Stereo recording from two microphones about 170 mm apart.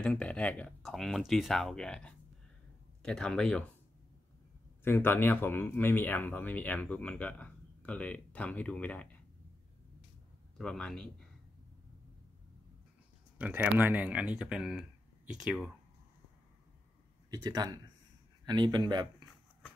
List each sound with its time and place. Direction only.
0.0 s speech: 5° left (ahead or behind)
4.8 s speech: 15° left (ahead or behind)
10.6 s speech: 5° left (ahead or behind)
13.4 s speech: 10° right (ahead or behind)
17.3 s speech: 20° right (ahead or behind)